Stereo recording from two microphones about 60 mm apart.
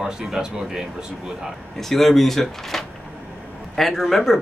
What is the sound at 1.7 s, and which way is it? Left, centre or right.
Speech, centre.